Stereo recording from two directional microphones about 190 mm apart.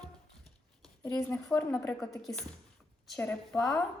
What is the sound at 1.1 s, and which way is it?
Speech, 5° left (ahead or behind).